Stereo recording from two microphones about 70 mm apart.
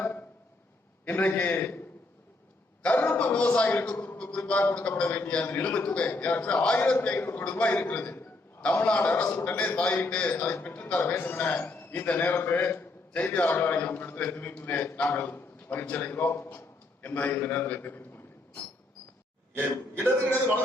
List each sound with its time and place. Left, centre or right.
0.0 s a sound: left
1.0 s a man's voice: left
2.8 s a man's voice: left
6.7 s a man's voice: left
7.4 s a man's voice: left